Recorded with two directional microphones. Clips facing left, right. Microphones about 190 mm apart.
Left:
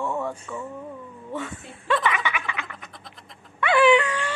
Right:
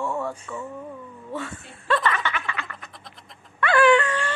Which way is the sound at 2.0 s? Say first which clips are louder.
Even; 10° left (ahead or behind).